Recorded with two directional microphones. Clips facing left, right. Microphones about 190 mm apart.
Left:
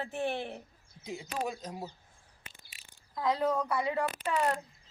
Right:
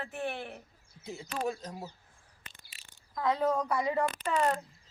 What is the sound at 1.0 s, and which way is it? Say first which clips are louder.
Speech: right 1 dB; 15° left (ahead or behind).